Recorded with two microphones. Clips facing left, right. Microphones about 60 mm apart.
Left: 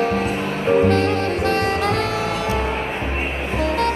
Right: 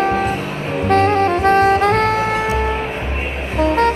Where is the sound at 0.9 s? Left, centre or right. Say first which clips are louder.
Right 5 dB; right.